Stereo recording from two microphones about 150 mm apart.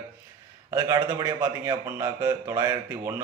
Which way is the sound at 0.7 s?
20° right (ahead or behind).